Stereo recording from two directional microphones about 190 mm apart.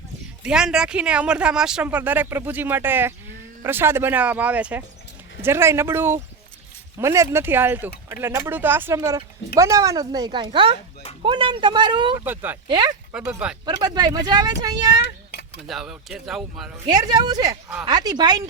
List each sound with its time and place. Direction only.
0.4 s speech: 5° right (ahead or behind); by 12.2 s 25° right (ahead or behind)
12.2 s speech: 10° right (ahead or behind)
12.6 s speech: 25° right (ahead or behind)
13.1 s speech: 5° right (ahead or behind)
13.7 s speech: 20° right (ahead or behind)
15.6 s speech: centre (ahead or behind)
16.8 s speech: 20° right (ahead or behind)